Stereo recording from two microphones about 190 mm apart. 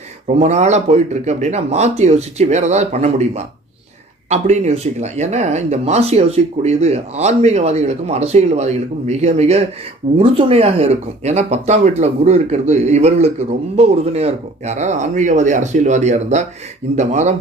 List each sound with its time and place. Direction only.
0.3 s speech: 35° right (ahead or behind)